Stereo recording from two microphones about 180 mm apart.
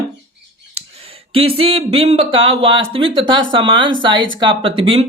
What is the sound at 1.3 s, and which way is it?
Speech, 30° right (ahead or behind).